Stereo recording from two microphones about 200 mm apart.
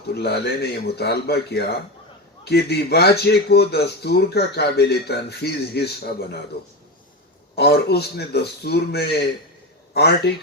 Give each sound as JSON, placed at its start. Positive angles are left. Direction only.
{"t": 0.1, "sound": "a man's voice", "side_deg": 55}
{"t": 7.5, "sound": "a man's voice", "side_deg": 55}